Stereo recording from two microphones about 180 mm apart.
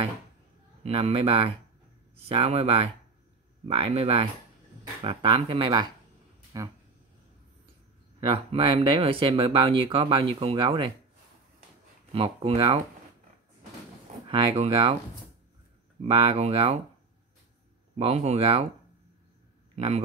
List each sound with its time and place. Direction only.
0.8 s speech: 35° right (ahead or behind)
8.2 s speech: 30° right (ahead or behind)
12.1 s speech: 30° right (ahead or behind)
14.3 s speech: 35° right (ahead or behind)
16.0 s speech: 30° right (ahead or behind)
17.9 s speech: 35° right (ahead or behind)
19.7 s a man's voice: 35° right (ahead or behind)